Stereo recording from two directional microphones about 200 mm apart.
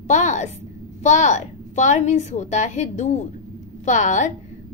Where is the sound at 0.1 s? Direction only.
35° left (ahead or behind).